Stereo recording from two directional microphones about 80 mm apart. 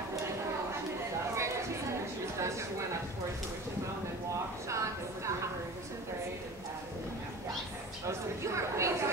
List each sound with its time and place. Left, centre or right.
1.3 s chatter: right
4.6 s a sound: right
8.7 s chatter: right